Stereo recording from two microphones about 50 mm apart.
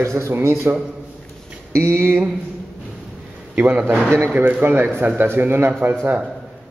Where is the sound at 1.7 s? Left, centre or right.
Right.